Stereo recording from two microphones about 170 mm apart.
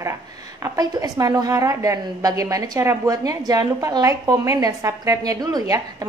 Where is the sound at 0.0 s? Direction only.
15° right (ahead or behind).